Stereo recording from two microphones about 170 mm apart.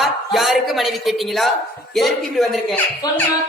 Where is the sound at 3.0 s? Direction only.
25° left (ahead or behind).